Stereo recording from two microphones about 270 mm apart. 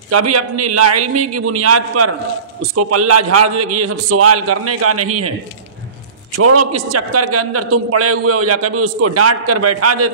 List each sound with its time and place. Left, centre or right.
0.1 s a man's voice: right
6.3 s a man's voice: right